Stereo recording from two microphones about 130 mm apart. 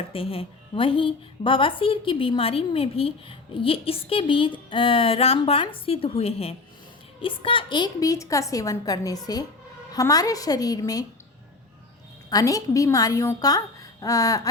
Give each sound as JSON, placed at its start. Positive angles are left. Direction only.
{"t": 0.1, "sound": "a woman's voice", "side_deg": 45}
{"t": 12.3, "sound": "a woman's voice", "side_deg": 25}